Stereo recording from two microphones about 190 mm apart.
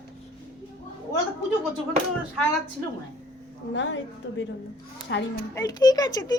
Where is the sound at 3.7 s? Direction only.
75° left (ahead or behind).